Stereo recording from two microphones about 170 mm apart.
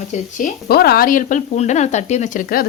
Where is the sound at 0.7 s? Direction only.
65° left (ahead or behind).